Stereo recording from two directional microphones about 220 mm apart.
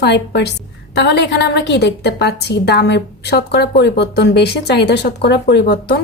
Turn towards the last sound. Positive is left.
turn(degrees=50)  # may be behind; listen again after turning